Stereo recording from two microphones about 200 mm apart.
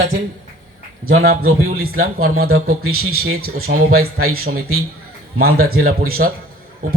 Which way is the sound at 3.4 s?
50° right (ahead or behind).